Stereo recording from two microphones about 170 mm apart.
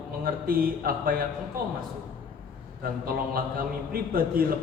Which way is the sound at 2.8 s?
60° right (ahead or behind).